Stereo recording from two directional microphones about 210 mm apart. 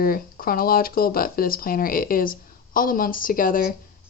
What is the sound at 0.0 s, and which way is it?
Speech, 45° left (ahead or behind).